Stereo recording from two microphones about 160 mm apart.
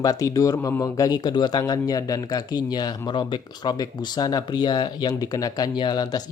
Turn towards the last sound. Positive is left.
turn(degrees=25)  # may be behind; listen again after turning